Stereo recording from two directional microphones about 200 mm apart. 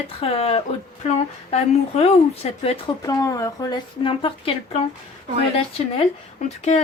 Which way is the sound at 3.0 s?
15° left (ahead or behind).